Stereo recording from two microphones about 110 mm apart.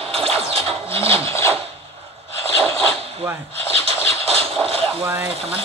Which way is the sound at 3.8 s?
65° right (ahead or behind).